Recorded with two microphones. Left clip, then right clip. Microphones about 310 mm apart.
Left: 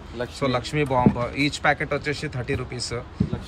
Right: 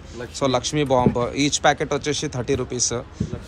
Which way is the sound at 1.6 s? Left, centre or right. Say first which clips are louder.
Right 3 dB; centre.